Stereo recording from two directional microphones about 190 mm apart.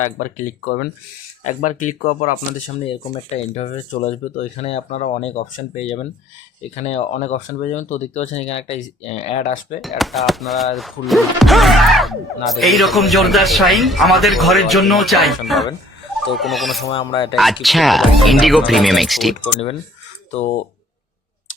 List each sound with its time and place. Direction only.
0.2 s speech: 40° left (ahead or behind)
9.8 s speech: centre (ahead or behind)
16.9 s speech: 25° left (ahead or behind)
17.3 s speech: centre (ahead or behind)
20.3 s speech: 35° left (ahead or behind)